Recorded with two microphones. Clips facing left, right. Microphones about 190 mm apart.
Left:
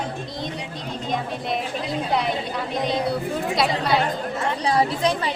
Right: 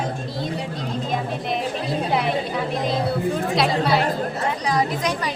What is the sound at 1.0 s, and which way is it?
A woman's voice, centre (ahead or behind).